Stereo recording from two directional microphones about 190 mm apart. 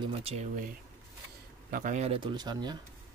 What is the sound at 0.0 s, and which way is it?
Speech, 30° right (ahead or behind).